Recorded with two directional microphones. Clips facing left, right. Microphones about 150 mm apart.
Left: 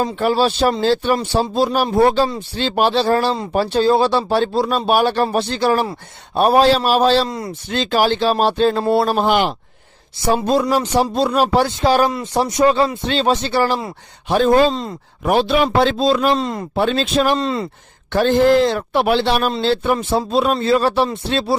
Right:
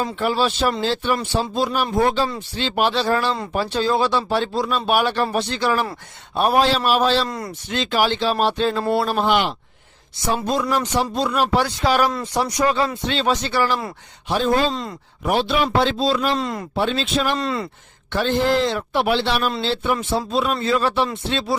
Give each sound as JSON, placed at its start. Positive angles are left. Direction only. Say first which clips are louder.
{"t": 0.0, "sound": "speech", "louder": "left 4 dB", "side_deg": 40}
{"t": 7.3, "sound": "a man's voice", "louder": "left 3 dB", "side_deg": 20}
{"t": 7.7, "sound": "a man's voice", "louder": "left 4 dB", "side_deg": 40}
{"t": 10.2, "sound": "a man's voice", "louder": "left 5 dB", "side_deg": 30}
{"t": 14.3, "sound": "a man's voice", "louder": "left 5 dB", "side_deg": 50}
{"t": 14.7, "sound": "a man's voice", "louder": "left 4 dB", "side_deg": 30}
{"t": 15.2, "sound": "a man's voice", "louder": "left 4 dB", "side_deg": 50}
{"t": 16.3, "sound": "a man's voice", "louder": "left 4 dB", "side_deg": 25}
{"t": 16.7, "sound": "a man's voice", "louder": "left 5 dB", "side_deg": 50}
{"t": 17.3, "sound": "a man's voice", "louder": "left 4 dB", "side_deg": 25}
{"t": 18.1, "sound": "a man's voice", "louder": "left 6 dB", "side_deg": 45}